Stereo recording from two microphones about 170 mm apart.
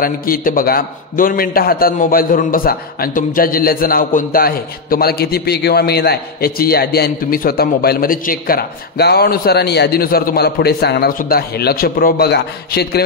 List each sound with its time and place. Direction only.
0.0 s a man's voice: 55° left (ahead or behind)